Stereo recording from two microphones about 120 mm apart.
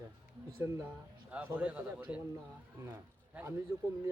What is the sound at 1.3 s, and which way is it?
A man's voice, 15° right (ahead or behind).